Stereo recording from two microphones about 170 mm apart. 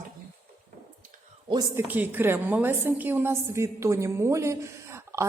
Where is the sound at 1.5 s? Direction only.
20° right (ahead or behind).